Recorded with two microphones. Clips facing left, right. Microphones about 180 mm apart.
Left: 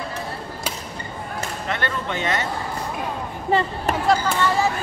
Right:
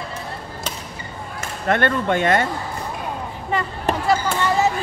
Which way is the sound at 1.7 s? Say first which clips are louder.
Right 9 dB; 50° right (ahead or behind).